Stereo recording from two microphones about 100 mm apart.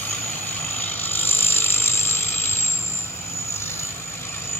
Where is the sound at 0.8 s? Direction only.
20° left (ahead or behind).